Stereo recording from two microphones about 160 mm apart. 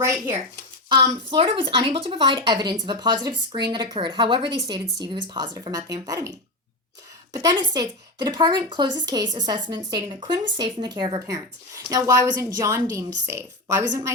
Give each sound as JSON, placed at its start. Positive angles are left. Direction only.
{"t": 0.9, "sound": "a woman's voice", "side_deg": -30}
{"t": 7.3, "sound": "speech", "side_deg": -25}